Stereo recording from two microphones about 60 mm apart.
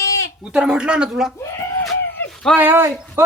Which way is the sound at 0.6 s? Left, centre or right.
Centre.